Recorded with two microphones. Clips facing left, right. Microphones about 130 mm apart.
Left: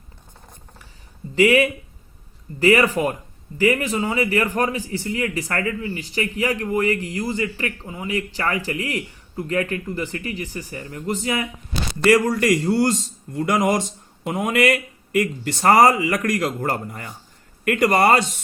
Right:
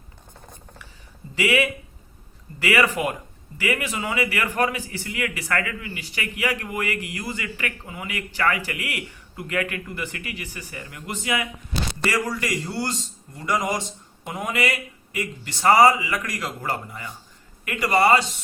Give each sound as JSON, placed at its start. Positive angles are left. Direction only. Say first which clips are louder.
{"t": 1.4, "sound": "a man's voice", "louder": "left 6 dB", "side_deg": 45}
{"t": 12.1, "sound": "a man's voice", "louder": "left 10 dB", "side_deg": 50}